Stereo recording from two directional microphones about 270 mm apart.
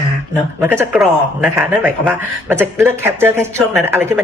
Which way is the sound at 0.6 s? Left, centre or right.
Centre.